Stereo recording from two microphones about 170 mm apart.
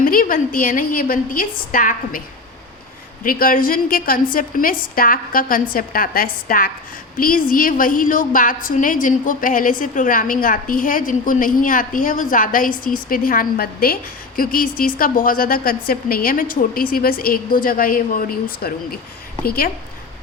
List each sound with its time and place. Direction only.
0.0 s a woman's voice: 55° left (ahead or behind)
3.2 s a woman's voice: 55° left (ahead or behind)